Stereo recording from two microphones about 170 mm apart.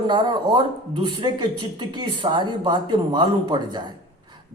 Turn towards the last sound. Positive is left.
turn(degrees=-25)  # may be behind; listen again after turning